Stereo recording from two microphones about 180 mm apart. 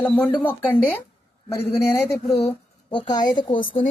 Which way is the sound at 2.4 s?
25° left (ahead or behind).